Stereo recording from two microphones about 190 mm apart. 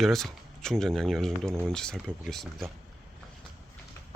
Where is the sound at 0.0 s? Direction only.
Centre (ahead or behind).